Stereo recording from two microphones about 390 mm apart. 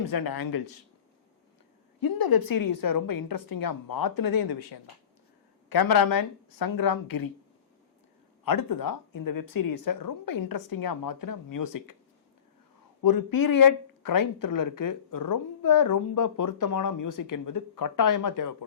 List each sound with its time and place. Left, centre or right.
0.1 s speech: left
2.0 s speech: left
8.4 s speech: left
13.0 s speech: left